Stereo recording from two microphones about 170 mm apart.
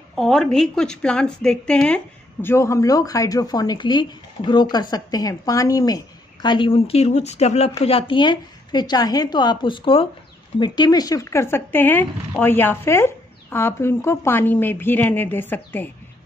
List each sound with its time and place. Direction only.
0.1 s speech: centre (ahead or behind)
2.4 s speech: 15° left (ahead or behind)